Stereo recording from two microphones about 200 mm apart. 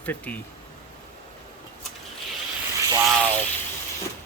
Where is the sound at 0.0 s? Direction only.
10° left (ahead or behind).